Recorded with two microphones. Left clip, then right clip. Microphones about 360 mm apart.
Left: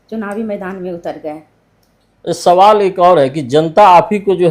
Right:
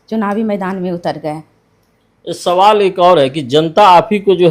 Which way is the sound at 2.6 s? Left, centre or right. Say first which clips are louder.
Right 1 dB; centre.